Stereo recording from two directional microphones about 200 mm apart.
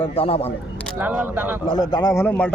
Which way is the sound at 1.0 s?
10° right (ahead or behind).